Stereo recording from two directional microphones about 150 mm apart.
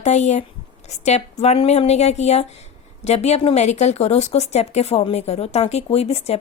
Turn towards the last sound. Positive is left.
turn(degrees=45)  # may be behind; listen again after turning